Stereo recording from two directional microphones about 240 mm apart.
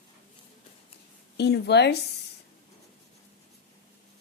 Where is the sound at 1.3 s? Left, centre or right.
Left.